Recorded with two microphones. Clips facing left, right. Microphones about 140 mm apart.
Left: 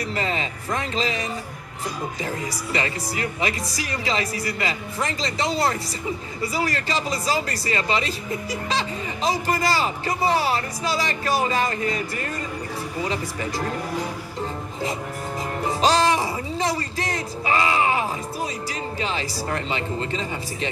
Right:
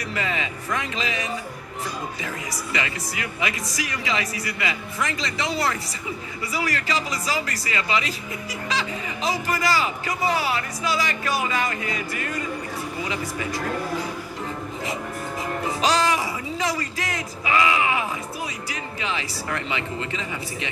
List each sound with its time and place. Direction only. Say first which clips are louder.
0.1 s speech: left 2 dB; 30° left (ahead or behind)
15.8 s speech: left 3 dB; 30° left (ahead or behind)